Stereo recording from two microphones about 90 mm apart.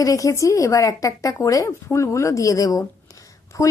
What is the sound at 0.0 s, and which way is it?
Speech, 40° left (ahead or behind).